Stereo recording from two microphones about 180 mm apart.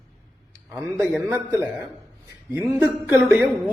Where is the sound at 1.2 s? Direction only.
10° right (ahead or behind).